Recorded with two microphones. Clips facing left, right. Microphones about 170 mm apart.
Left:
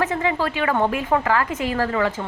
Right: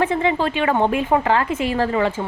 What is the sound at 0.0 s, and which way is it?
A woman's voice, 30° right (ahead or behind).